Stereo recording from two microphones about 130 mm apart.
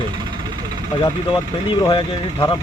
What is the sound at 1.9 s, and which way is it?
Speech, 35° left (ahead or behind).